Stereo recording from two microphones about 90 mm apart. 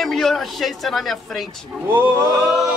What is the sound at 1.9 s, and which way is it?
Speech, 25° right (ahead or behind).